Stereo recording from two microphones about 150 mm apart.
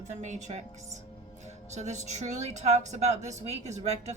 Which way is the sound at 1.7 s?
50° right (ahead or behind).